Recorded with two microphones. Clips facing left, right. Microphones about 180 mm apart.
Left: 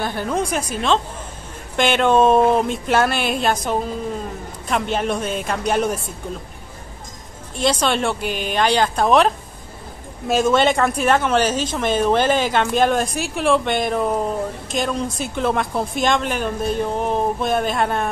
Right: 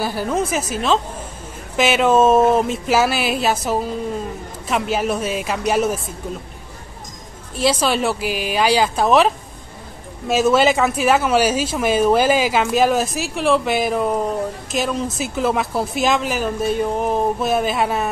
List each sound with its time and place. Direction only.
0.0 s speech: 5° right (ahead or behind)
7.5 s speech: 5° right (ahead or behind)